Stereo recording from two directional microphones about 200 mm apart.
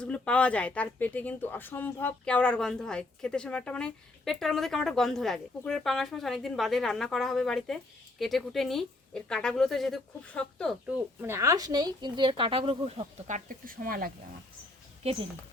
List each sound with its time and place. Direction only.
0.0 s speech: 5° left (ahead or behind)
11.2 s speech: 15° right (ahead or behind); by 14.1 s 45° right (ahead or behind)